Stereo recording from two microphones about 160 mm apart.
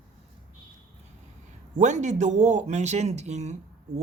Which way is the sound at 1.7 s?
50° right (ahead or behind).